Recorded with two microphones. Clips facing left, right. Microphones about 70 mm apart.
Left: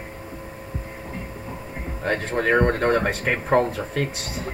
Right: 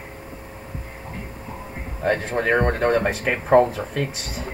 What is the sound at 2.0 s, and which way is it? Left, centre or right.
Speech, centre.